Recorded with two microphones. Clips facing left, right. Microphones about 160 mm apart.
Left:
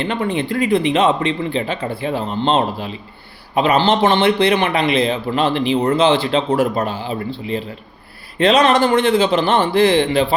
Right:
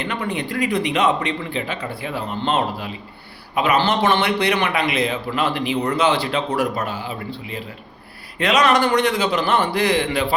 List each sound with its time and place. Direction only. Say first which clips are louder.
0.0 s a man's voice: left 5 dB; 30° left (ahead or behind)